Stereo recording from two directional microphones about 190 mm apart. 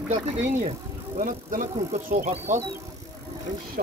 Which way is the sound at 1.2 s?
45° right (ahead or behind).